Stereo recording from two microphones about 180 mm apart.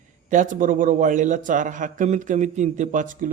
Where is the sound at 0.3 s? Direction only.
45° right (ahead or behind).